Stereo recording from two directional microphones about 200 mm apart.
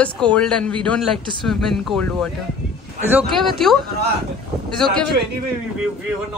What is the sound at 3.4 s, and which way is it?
Speech, centre (ahead or behind).